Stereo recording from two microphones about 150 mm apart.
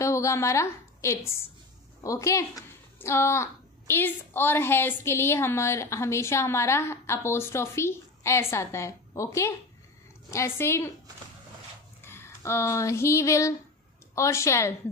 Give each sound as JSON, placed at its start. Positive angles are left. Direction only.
{"t": 0.0, "sound": "a woman's voice", "side_deg": 20}
{"t": 12.0, "sound": "a sound", "side_deg": 15}
{"t": 14.1, "sound": "a woman's voice", "side_deg": 20}